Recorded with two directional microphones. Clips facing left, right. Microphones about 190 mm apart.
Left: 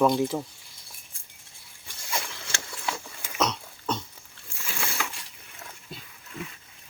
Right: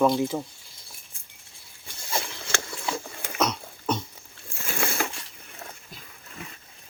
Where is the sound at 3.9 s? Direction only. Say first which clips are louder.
Right 3 dB; 10° right (ahead or behind).